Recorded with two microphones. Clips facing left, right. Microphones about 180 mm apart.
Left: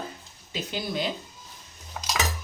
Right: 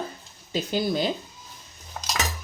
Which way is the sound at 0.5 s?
40° right (ahead or behind).